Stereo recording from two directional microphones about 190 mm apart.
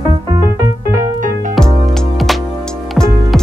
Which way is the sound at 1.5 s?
5° left (ahead or behind).